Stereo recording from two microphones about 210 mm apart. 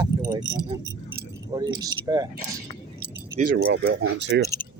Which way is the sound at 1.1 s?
20° right (ahead or behind).